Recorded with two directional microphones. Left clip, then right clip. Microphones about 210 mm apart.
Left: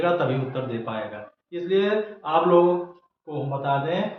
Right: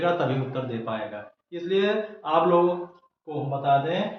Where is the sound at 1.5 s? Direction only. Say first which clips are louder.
Left 2 dB; 15° right (ahead or behind).